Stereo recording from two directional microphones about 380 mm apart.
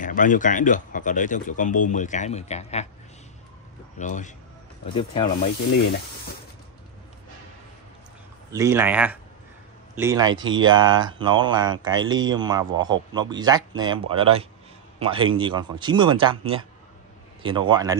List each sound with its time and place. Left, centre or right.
0.0 s speech: left
4.0 s speech: centre
8.5 s speech: centre